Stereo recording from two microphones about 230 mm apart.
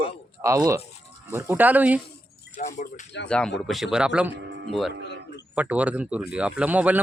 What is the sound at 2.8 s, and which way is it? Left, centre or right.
Speech, left.